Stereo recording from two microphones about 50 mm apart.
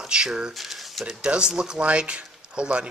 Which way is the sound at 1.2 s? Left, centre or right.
Centre.